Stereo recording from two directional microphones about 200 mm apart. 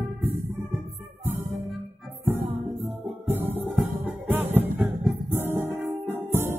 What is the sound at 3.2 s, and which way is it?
Music, 10° right (ahead or behind).